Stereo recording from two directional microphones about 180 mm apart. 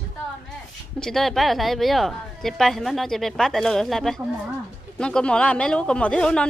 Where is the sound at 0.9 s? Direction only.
5° left (ahead or behind).